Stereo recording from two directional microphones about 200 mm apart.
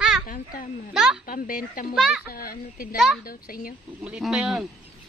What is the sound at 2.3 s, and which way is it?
Speech, 45° left (ahead or behind).